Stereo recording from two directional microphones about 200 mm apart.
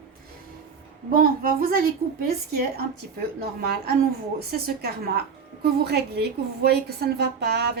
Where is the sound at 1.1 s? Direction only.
45° right (ahead or behind).